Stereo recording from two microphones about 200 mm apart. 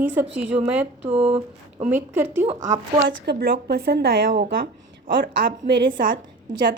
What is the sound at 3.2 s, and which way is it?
A woman's voice, 55° right (ahead or behind).